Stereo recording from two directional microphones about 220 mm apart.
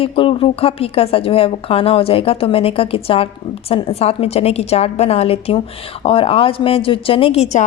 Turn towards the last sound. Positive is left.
turn(degrees=30)  # may be behind; listen again after turning